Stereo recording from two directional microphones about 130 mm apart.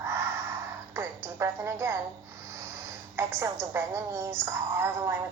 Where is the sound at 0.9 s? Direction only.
20° right (ahead or behind).